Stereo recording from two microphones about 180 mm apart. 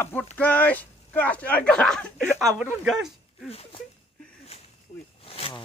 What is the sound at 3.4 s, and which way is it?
Speech, 35° left (ahead or behind).